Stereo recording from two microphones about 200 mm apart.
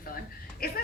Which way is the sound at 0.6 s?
45° left (ahead or behind).